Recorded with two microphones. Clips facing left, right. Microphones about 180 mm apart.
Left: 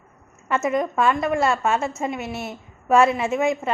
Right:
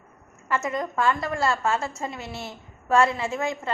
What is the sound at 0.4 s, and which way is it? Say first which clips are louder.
A woman's voice: left 5 dB; 20° left (ahead or behind).